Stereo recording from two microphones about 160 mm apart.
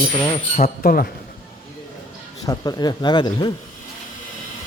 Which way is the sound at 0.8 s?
65° left (ahead or behind).